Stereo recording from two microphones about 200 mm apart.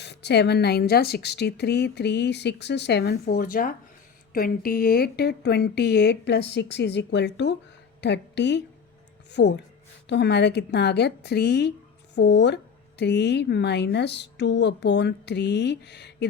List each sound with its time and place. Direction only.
0.0 s a woman's voice: 55° left (ahead or behind)